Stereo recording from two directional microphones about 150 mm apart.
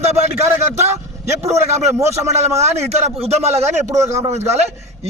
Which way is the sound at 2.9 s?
45° right (ahead or behind).